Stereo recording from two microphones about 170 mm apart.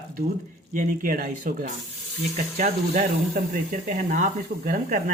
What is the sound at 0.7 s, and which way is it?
Speech, 55° right (ahead or behind).